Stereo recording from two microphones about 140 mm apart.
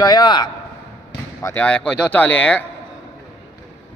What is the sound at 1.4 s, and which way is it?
Speech, 10° left (ahead or behind).